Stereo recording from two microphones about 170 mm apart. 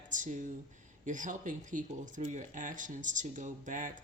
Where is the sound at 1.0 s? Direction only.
50° right (ahead or behind).